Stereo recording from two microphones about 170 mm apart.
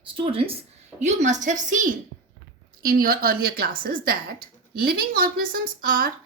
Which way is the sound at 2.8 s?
55° right (ahead or behind).